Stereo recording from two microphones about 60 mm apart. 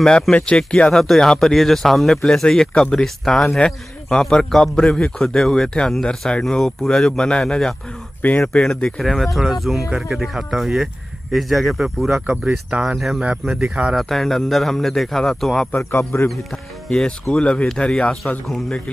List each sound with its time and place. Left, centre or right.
0.3 s speech: centre
6.4 s speech: centre
8.9 s speech: centre
12.3 s speech: centre
12.8 s speech: centre
15.8 s speech: left
16.9 s speech: centre